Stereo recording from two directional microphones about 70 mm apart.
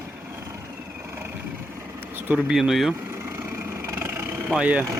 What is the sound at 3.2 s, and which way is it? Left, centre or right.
Vehicle, right.